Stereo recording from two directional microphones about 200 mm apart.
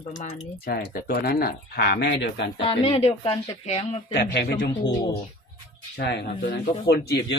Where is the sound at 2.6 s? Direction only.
25° left (ahead or behind).